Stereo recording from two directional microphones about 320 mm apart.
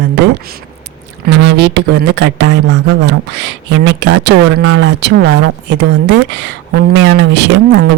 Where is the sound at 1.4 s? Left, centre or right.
Right.